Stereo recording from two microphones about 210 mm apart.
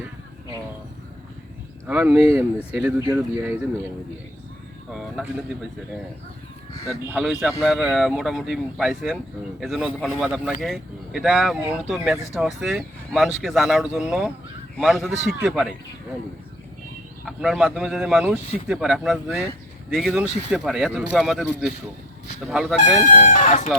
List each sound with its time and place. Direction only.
1.9 s speech: 5° right (ahead or behind)
4.9 s speech: centre (ahead or behind)
6.8 s speech: centre (ahead or behind)
17.2 s speech: centre (ahead or behind)
23.0 s speech: 35° left (ahead or behind)